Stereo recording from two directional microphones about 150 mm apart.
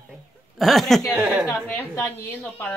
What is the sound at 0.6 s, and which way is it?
Speech, centre (ahead or behind).